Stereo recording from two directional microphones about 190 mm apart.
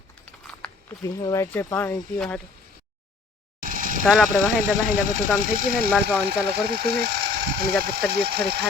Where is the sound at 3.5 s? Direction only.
45° right (ahead or behind).